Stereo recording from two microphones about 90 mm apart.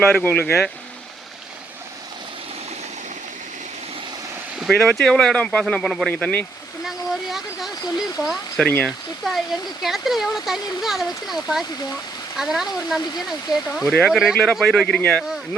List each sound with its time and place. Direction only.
0.0 s speech: 10° left (ahead or behind)
4.6 s speech: 5° left (ahead or behind)
6.8 s speech: 5° right (ahead or behind)
8.6 s speech: 15° left (ahead or behind)
9.2 s speech: centre (ahead or behind)